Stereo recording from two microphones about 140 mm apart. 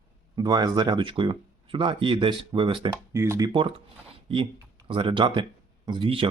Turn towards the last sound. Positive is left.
turn(degrees=-40)  # may be behind; listen again after turning